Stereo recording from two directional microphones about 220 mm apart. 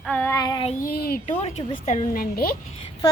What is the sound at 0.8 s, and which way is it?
Speech, 45° left (ahead or behind).